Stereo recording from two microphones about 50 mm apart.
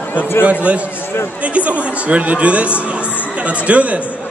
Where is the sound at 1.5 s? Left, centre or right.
Right.